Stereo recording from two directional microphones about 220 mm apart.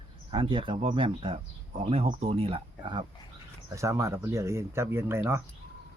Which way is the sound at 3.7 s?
15° right (ahead or behind).